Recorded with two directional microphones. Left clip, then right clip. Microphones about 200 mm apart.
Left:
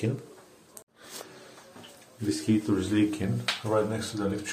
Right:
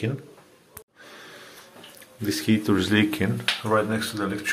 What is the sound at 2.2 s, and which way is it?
Speech, 15° right (ahead or behind).